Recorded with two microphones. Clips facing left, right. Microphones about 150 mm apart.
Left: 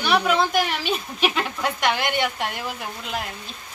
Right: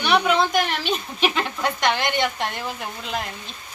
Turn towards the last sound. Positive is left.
turn(degrees=5)  # may be behind; listen again after turning